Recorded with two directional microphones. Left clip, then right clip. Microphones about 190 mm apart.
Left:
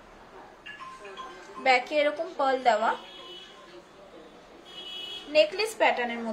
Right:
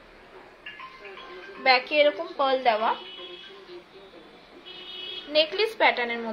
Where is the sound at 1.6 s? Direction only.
10° left (ahead or behind).